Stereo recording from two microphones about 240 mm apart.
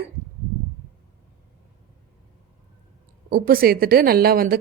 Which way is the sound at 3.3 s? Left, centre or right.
Right.